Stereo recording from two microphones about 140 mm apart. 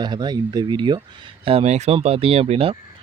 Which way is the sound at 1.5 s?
50° right (ahead or behind).